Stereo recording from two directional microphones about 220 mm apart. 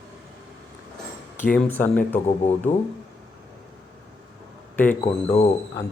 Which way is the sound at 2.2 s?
30° left (ahead or behind).